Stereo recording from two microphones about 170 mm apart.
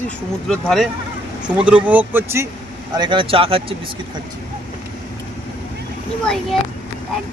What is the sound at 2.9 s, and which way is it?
Speech, 30° right (ahead or behind).